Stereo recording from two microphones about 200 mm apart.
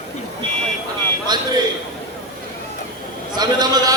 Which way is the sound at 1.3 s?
20° right (ahead or behind).